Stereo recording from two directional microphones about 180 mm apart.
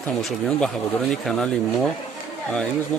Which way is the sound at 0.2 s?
Centre (ahead or behind).